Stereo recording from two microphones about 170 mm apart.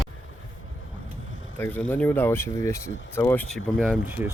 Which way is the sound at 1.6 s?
10° left (ahead or behind).